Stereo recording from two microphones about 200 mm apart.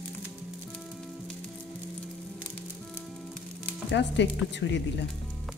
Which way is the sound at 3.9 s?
60° left (ahead or behind).